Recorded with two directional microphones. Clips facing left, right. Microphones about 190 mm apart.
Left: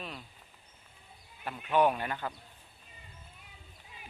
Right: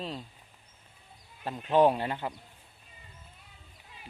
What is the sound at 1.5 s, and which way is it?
Speech, 30° right (ahead or behind).